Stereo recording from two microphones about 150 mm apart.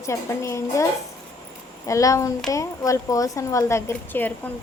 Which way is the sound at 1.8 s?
20° left (ahead or behind).